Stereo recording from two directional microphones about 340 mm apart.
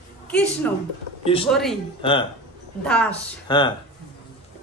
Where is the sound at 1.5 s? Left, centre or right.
Centre.